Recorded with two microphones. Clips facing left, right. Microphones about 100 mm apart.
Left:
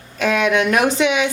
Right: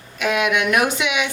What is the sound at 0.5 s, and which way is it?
Speech, 35° left (ahead or behind).